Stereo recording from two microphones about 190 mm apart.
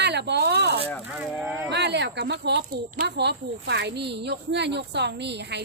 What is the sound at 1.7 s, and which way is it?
Speech, 60° right (ahead or behind).